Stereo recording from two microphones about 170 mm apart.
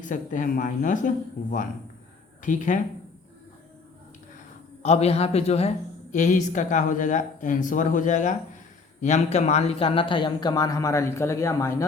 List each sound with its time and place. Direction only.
0.0 s a man's voice: 50° left (ahead or behind)
4.8 s a man's voice: 40° left (ahead or behind); by 11.9 s 15° left (ahead or behind)